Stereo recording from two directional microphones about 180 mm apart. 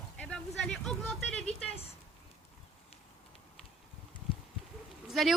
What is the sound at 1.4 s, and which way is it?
Speech, 35° left (ahead or behind).